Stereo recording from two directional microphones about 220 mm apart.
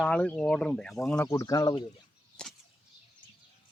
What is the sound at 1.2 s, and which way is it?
Speech, 15° left (ahead or behind).